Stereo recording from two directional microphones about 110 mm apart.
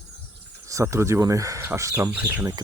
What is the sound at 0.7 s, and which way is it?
Speech, 25° right (ahead or behind).